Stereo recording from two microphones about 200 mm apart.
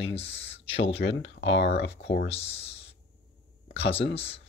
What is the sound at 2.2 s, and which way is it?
Speech, 30° left (ahead or behind).